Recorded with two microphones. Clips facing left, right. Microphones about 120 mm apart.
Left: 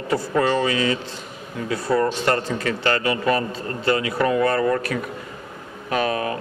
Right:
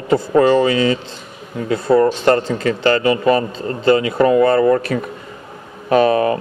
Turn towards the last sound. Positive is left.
turn(degrees=-35)  # may be behind; listen again after turning